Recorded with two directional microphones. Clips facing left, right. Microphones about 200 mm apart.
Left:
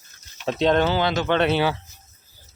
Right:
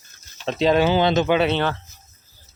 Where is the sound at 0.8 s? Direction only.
20° right (ahead or behind).